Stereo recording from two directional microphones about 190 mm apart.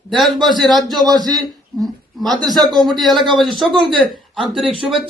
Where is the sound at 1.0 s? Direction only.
20° right (ahead or behind).